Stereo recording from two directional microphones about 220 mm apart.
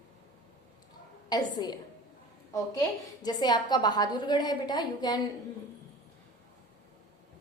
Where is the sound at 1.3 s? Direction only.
20° left (ahead or behind).